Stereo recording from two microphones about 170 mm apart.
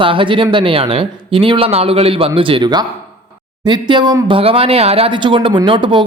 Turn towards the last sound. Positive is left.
turn(degrees=-30)  # may be behind; listen again after turning